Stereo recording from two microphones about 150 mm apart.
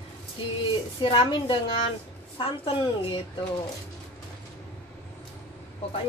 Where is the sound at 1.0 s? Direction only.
35° left (ahead or behind).